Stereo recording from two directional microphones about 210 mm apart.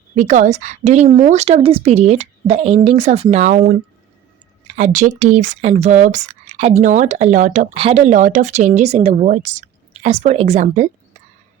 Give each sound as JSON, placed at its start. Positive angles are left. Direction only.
{"t": 0.2, "sound": "speech", "side_deg": -35}